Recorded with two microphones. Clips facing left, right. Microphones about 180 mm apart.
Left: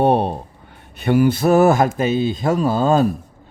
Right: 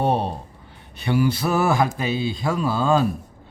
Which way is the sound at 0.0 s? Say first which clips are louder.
Left 6 dB; 60° left (ahead or behind).